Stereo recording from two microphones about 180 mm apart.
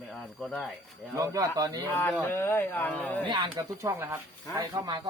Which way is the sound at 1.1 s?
20° right (ahead or behind).